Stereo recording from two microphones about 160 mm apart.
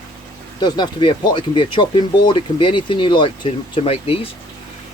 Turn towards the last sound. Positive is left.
turn(degrees=35)  # may be behind; listen again after turning